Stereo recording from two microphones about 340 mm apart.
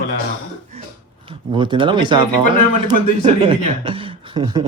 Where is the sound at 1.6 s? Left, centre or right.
Centre.